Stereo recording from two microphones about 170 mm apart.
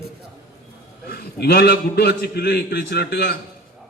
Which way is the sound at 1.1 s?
70° left (ahead or behind).